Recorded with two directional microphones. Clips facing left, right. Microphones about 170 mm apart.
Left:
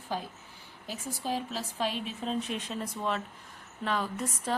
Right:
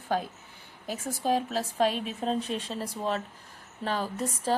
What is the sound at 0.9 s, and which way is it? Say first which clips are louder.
A woman's voice: right 6 dB; 45° right (ahead or behind).